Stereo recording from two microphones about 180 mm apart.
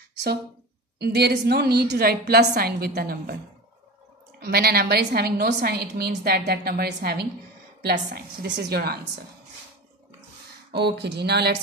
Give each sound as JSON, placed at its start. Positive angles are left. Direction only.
{"t": 0.1, "sound": "a sound", "side_deg": -65}
{"t": 0.9, "sound": "a woman's voice", "side_deg": -65}
{"t": 4.4, "sound": "a woman's voice", "side_deg": -60}
{"t": 10.7, "sound": "a woman's voice", "side_deg": -65}